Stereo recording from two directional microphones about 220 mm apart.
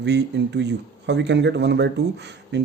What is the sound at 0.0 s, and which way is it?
Speech, 50° right (ahead or behind).